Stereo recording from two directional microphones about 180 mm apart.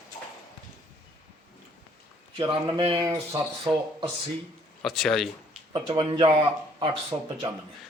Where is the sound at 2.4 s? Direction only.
25° right (ahead or behind).